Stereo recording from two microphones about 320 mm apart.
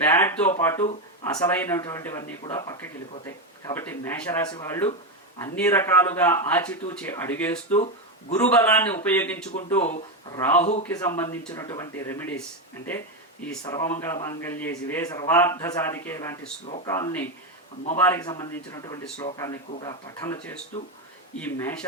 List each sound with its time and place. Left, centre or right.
0.1 s a man's voice: centre
9.7 s speech: left
10.3 s a man's voice: centre
13.4 s a man's voice: centre
16.6 s speech: left
16.9 s a man's voice: centre